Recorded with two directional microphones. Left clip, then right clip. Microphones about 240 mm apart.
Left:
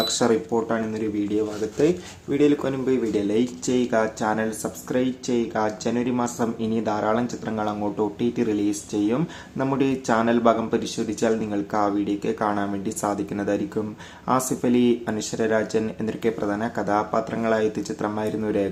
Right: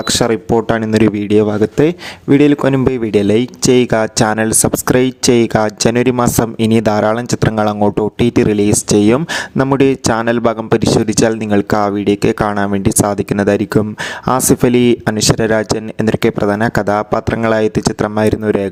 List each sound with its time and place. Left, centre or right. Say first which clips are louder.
0.1 s a man's voice: right 8 dB; right